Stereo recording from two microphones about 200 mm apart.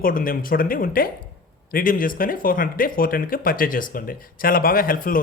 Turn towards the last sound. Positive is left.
turn(degrees=45)  # may be behind; listen again after turning